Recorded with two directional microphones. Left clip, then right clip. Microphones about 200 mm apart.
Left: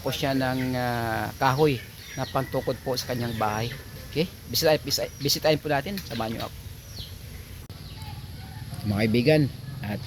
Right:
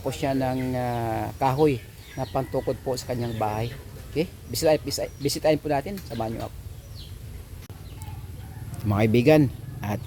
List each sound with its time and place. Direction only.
0.1 s speech: 5° right (ahead or behind)
8.9 s speech: 5° right (ahead or behind)